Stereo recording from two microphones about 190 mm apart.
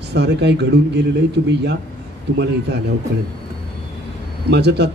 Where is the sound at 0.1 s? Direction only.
65° right (ahead or behind).